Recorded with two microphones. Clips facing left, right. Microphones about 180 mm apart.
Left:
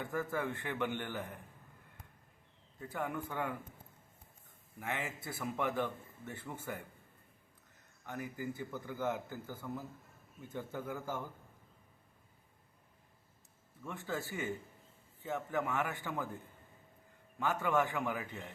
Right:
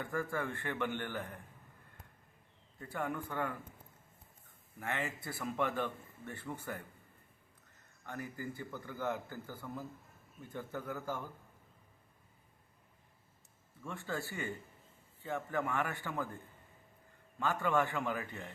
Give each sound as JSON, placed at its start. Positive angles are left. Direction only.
{"t": 0.0, "sound": "a man's voice", "side_deg": 15}
{"t": 3.2, "sound": "a man's voice", "side_deg": 15}
{"t": 4.8, "sound": "a man's voice", "side_deg": 15}
{"t": 8.0, "sound": "a man's voice", "side_deg": 15}
{"t": 13.8, "sound": "a man's voice", "side_deg": 20}
{"t": 17.4, "sound": "a man's voice", "side_deg": 15}